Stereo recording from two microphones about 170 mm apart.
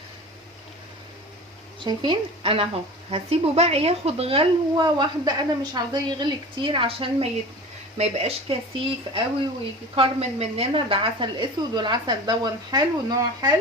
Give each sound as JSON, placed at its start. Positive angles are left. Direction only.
{"t": 1.8, "sound": "speech", "side_deg": -30}